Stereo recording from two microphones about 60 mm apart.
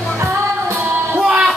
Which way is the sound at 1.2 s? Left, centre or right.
Centre.